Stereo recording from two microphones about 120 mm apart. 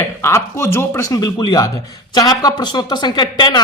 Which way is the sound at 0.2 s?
25° left (ahead or behind).